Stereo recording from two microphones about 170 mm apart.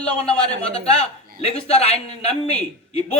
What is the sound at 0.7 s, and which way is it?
A man's voice, 35° left (ahead or behind).